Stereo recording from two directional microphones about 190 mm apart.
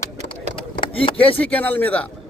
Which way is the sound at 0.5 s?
25° left (ahead or behind).